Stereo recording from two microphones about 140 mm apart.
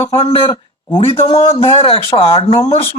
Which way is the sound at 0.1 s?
40° left (ahead or behind).